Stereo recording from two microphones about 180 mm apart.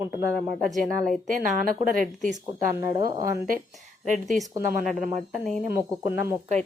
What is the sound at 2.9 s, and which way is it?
Speech, 25° right (ahead or behind).